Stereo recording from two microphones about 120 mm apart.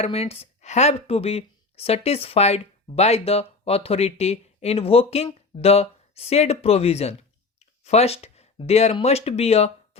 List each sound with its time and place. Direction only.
0.0 s speech: 60° left (ahead or behind)